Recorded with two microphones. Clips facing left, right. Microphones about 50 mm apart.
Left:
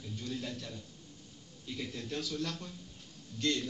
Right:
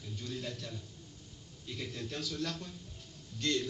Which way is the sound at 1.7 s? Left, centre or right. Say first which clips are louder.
Left 1 dB; centre.